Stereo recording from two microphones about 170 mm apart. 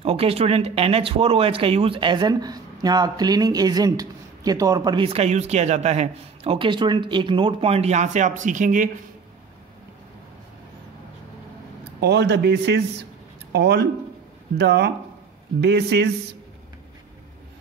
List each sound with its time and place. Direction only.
0.0 s speech: 35° right (ahead or behind)
12.0 s a man's voice: 80° right
13.5 s speech: 75° right (ahead or behind)